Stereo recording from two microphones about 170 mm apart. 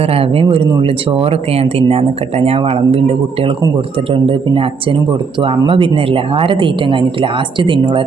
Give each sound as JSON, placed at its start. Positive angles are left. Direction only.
{"t": 0.0, "sound": "speech", "side_deg": -35}